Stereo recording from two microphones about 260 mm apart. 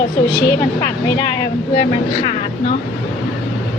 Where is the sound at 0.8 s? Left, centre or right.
Centre.